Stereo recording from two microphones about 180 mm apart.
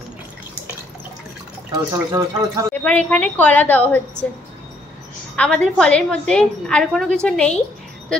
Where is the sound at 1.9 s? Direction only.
15° right (ahead or behind).